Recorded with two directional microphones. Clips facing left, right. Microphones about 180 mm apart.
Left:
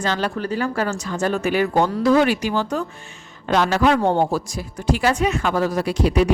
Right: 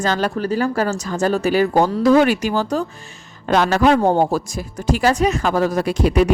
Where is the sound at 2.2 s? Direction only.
50° right (ahead or behind).